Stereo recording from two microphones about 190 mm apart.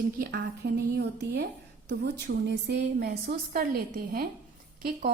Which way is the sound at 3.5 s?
50° right (ahead or behind).